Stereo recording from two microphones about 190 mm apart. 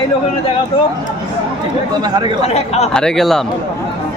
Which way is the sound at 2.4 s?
35° left (ahead or behind).